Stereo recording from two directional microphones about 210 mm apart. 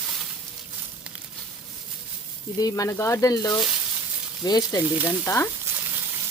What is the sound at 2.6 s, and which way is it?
Speech, 15° left (ahead or behind).